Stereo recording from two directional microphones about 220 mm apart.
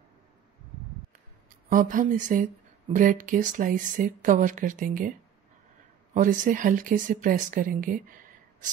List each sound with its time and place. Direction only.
1.7 s speech: 35° right (ahead or behind)
6.1 s speech: 35° right (ahead or behind)